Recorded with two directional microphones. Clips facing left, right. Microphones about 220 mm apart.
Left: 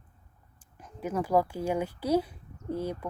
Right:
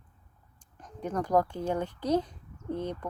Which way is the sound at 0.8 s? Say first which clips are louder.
Left 1 dB; 5° left (ahead or behind).